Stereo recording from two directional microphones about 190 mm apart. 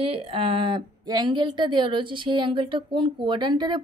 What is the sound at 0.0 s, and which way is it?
A woman's voice, 30° right (ahead or behind).